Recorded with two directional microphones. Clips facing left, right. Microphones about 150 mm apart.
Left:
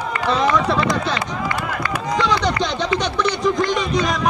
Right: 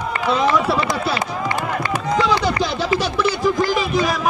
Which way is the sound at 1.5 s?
25° right (ahead or behind).